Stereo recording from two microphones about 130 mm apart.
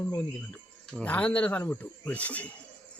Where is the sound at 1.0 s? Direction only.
10° left (ahead or behind).